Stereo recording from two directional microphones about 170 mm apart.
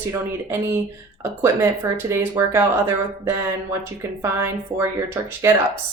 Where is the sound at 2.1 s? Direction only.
15° right (ahead or behind).